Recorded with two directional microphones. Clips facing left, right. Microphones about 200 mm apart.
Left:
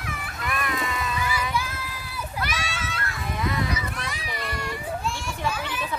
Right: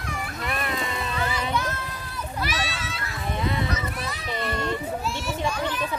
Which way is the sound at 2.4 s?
Centre (ahead or behind).